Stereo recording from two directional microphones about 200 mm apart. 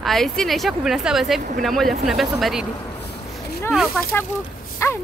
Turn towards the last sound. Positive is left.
turn(degrees=15)  # may be behind; listen again after turning